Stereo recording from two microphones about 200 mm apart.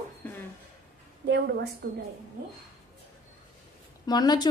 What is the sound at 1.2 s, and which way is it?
Speech, 55° right (ahead or behind).